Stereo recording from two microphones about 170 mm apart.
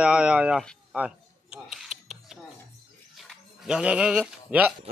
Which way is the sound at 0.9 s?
5° right (ahead or behind).